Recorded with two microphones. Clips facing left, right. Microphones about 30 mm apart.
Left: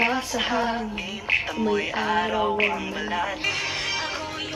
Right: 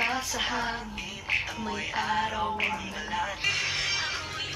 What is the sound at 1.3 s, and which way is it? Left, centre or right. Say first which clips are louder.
Music: left 7 dB; centre.